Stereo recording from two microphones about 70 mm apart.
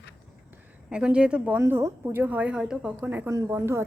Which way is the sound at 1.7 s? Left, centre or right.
Right.